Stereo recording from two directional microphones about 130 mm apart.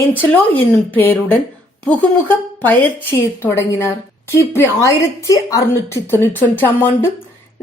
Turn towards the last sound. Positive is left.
turn(degrees=15)  # may be behind; listen again after turning